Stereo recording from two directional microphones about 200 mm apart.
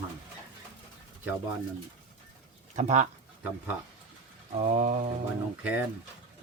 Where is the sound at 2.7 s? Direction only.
35° right (ahead or behind).